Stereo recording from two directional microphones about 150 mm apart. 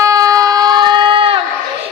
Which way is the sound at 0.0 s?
20° right (ahead or behind).